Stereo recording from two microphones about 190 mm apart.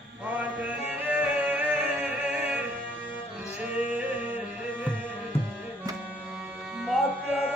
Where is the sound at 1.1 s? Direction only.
10° right (ahead or behind).